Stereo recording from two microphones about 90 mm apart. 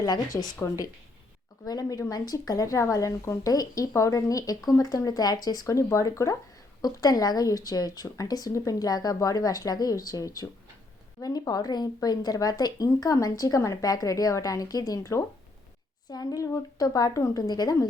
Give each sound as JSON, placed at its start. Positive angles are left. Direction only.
{"t": 0.0, "sound": "a woman's voice", "side_deg": 45}